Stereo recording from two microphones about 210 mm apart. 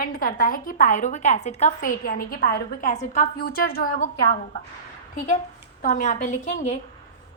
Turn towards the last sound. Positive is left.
turn(degrees=35)  # may be behind; listen again after turning